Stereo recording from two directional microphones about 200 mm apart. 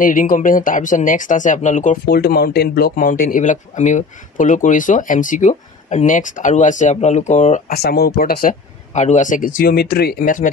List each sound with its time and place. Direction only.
0.0 s speech: 45° left (ahead or behind)
7.8 s speech: 50° left (ahead or behind)
9.6 s speech: 50° left (ahead or behind)